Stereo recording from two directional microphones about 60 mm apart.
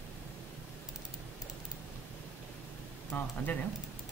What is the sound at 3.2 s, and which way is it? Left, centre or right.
Speech, left.